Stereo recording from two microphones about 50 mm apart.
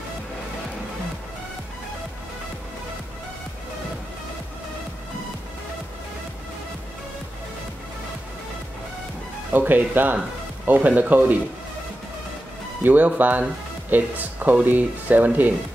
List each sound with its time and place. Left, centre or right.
9.5 s speech: right
12.8 s speech: right